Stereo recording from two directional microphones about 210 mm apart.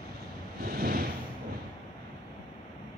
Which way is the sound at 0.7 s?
45° right (ahead or behind).